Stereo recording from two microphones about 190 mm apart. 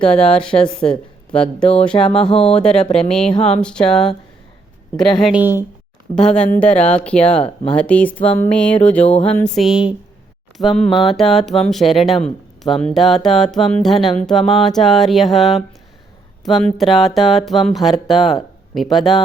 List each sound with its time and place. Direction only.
0.0 s speech: 5° left (ahead or behind)
0.8 s speech: 30° left (ahead or behind)
1.3 s speech: 5° left (ahead or behind)
2.2 s speech: 30° left (ahead or behind)
2.6 s speech: 5° left (ahead or behind)
3.2 s speech: 35° left (ahead or behind)
3.6 s speech: 5° left (ahead or behind)
6.2 s speech: 5° left (ahead or behind)
7.4 s speech: 30° left (ahead or behind)
7.8 s a sound: 5° left (ahead or behind)
9.4 s speech: centre (ahead or behind)